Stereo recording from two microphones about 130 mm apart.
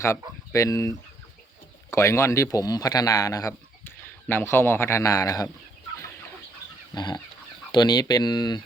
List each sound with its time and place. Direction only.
0.5 s speech: 25° left (ahead or behind)
3.8 s a man's voice: 15° left (ahead or behind)
6.9 s speech: 35° left (ahead or behind)